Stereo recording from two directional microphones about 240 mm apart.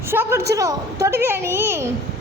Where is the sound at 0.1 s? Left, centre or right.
Centre.